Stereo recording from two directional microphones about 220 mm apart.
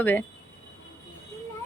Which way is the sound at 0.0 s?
10° left (ahead or behind).